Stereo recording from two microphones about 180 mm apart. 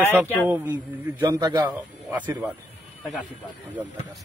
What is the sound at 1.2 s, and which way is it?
Speech, 20° right (ahead or behind).